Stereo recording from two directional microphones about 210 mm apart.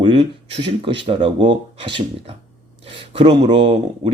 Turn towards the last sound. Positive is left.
turn(degrees=-20)  # may be behind; listen again after turning